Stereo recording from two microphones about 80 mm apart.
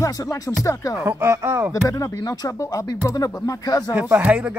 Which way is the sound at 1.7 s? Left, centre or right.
Left.